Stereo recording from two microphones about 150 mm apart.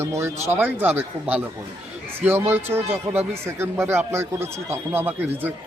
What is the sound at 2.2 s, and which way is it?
Speech, 15° right (ahead or behind).